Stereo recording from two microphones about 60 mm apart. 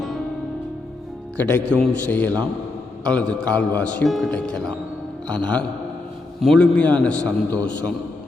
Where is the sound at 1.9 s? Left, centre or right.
Left.